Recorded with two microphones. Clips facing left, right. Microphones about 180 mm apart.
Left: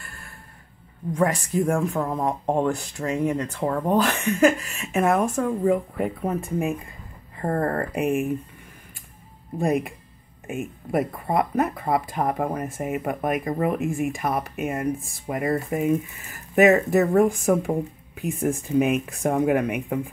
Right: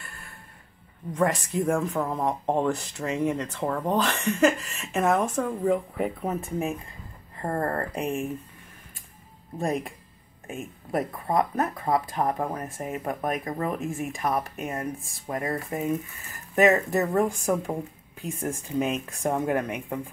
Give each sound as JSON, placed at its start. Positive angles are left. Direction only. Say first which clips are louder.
{"t": 1.1, "sound": "speech", "louder": "left 2 dB", "side_deg": 0}
{"t": 7.9, "sound": "speech", "louder": "left 5 dB", "side_deg": 15}
{"t": 9.6, "sound": "speech", "louder": "left 5 dB", "side_deg": 10}